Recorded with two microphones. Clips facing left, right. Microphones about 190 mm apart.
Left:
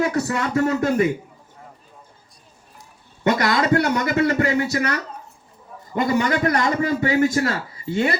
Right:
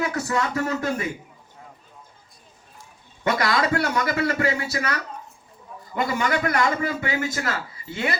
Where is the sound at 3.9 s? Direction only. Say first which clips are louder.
Left 4 dB; 25° left (ahead or behind).